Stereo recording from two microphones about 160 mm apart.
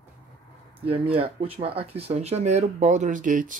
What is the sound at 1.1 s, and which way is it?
Speech, 35° right (ahead or behind).